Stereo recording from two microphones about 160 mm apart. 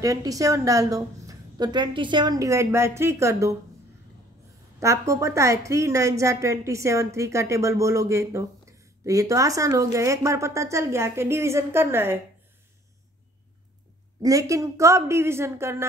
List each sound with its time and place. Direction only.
0.0 s a woman's voice: 20° right (ahead or behind)
4.7 s a woman's voice: 20° right (ahead or behind)
14.2 s a woman's voice: 20° right (ahead or behind)